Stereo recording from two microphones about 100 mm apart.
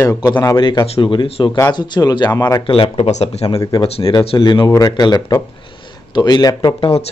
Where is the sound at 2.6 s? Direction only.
65° left (ahead or behind); by 4.1 s 90° left.